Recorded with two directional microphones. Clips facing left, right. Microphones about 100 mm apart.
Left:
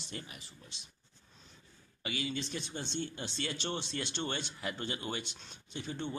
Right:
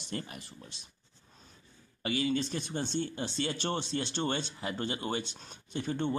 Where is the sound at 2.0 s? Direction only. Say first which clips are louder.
Right 7 dB; 40° right (ahead or behind).